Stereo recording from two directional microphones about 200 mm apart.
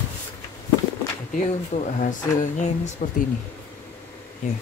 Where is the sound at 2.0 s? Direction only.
40° left (ahead or behind).